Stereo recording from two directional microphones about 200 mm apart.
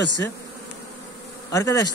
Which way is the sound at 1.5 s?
15° left (ahead or behind).